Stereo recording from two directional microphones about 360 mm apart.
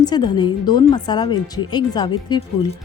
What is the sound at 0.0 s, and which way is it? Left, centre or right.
A woman's voice, centre.